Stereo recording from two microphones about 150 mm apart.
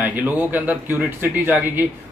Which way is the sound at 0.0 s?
10° right (ahead or behind).